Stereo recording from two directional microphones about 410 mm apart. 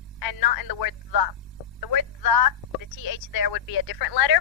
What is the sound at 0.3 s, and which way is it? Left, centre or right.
Speech, left.